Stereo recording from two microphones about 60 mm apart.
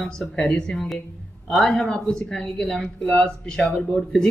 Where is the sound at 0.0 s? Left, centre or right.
Centre.